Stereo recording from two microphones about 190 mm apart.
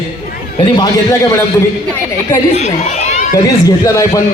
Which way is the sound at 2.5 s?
35° left (ahead or behind).